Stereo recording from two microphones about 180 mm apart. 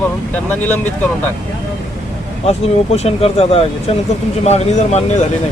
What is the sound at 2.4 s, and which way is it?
Speech, 35° left (ahead or behind).